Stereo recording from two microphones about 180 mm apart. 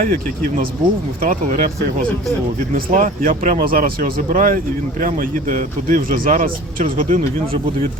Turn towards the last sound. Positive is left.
turn(degrees=-50)  # may be behind; listen again after turning